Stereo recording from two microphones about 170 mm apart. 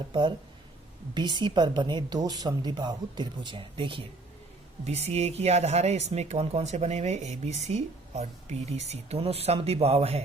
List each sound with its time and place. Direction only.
0.1 s speech: 30° right (ahead or behind)